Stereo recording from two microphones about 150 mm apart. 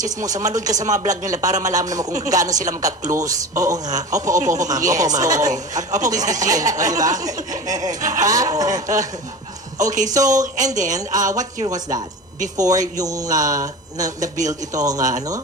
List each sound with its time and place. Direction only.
0.0 s speech: 25° right (ahead or behind)
10.1 s speech: 25° right (ahead or behind)